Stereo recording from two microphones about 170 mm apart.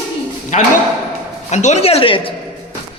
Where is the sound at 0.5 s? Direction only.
45° left (ahead or behind).